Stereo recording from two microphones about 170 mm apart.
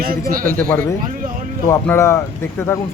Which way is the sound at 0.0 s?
60° right (ahead or behind).